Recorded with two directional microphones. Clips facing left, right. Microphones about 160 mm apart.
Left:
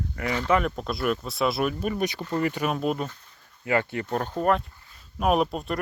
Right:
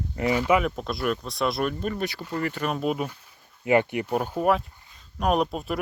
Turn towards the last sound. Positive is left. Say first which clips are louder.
# left 1 dB
turn(degrees=0)  # may be behind; listen again after turning